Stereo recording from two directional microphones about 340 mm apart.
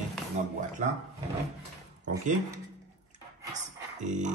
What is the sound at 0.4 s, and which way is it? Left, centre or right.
Speech, centre.